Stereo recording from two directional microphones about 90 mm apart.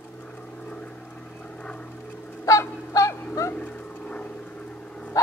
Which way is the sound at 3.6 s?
15° left (ahead or behind).